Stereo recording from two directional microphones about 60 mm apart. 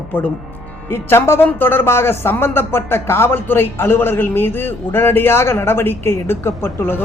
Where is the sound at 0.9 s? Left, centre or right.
Left.